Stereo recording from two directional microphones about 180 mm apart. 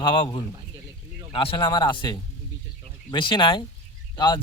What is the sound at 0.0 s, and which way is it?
A man's voice, 25° left (ahead or behind).